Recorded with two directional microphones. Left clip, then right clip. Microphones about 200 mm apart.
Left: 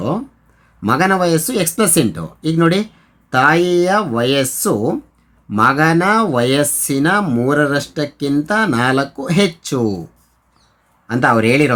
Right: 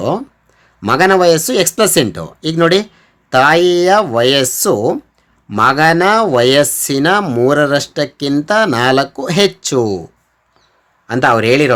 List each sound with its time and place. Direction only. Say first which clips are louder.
0.8 s speech: right 4 dB; 30° right (ahead or behind)
11.0 s a man's voice: right 2 dB; 25° right (ahead or behind)